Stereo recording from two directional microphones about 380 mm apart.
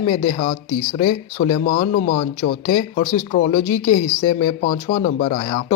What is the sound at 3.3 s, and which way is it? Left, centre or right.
Speech, centre.